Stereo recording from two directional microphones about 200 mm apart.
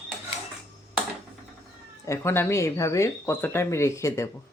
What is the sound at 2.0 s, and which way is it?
Speech, 15° left (ahead or behind).